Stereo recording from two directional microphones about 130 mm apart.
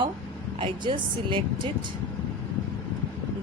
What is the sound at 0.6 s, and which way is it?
Speech, 40° right (ahead or behind).